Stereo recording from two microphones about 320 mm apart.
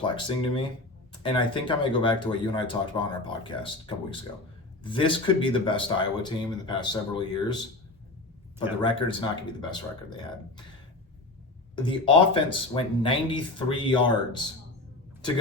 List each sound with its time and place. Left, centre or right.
0.0 s speech: centre
8.8 s speech: centre
11.8 s speech: centre